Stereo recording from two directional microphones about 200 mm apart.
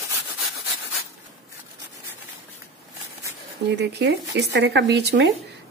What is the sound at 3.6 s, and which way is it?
Speech, 55° right (ahead or behind).